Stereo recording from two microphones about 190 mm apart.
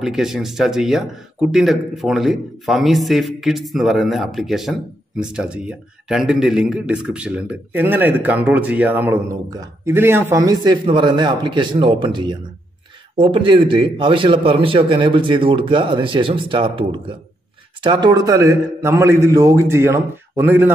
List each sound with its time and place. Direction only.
0.0 s a man's voice: centre (ahead or behind)